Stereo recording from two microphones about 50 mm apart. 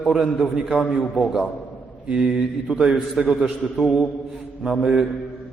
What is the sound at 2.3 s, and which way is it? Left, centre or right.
A man's voice, centre.